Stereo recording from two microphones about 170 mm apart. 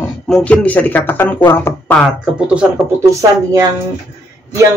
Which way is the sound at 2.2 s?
5° right (ahead or behind).